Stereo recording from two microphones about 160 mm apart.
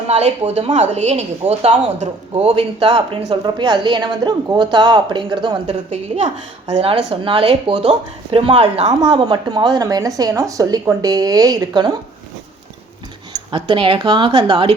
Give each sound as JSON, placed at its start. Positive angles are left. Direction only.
{"t": 0.1, "sound": "speech", "side_deg": -45}
{"t": 5.9, "sound": "speech", "side_deg": -45}
{"t": 8.9, "sound": "speech", "side_deg": -30}
{"t": 13.5, "sound": "speech", "side_deg": -30}